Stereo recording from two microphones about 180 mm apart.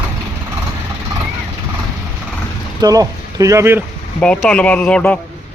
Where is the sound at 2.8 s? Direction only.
20° right (ahead or behind).